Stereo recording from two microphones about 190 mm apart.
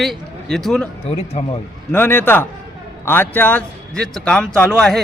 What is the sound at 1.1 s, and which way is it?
Speech, 30° left (ahead or behind).